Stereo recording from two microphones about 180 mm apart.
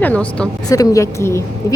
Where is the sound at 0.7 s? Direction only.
20° left (ahead or behind).